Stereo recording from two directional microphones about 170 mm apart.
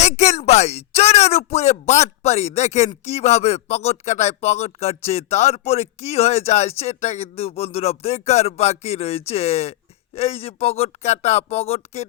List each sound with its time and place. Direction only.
0.0 s speech: 40° left (ahead or behind)